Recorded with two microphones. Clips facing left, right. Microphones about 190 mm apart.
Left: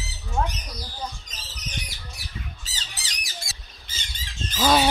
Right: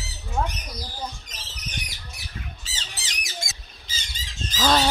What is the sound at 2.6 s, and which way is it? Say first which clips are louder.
Squeak: right 1 dB; 40° left (ahead or behind).